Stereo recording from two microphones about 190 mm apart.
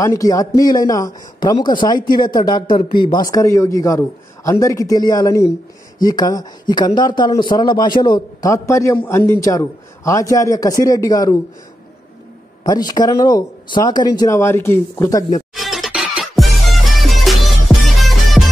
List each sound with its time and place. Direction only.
0.0 s speech: 15° left (ahead or behind)
12.6 s speech: 20° left (ahead or behind)
15.5 s music: centre (ahead or behind)